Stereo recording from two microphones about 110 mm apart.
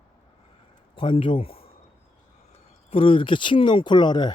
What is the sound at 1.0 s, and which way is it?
Speech, 50° left (ahead or behind).